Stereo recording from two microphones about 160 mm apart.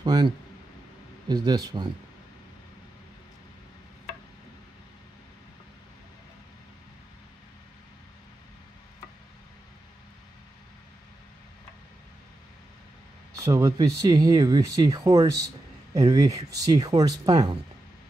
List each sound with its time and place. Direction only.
0.0 s speech: 25° right (ahead or behind)
1.3 s speech: 25° right (ahead or behind)
13.4 s speech: 20° right (ahead or behind)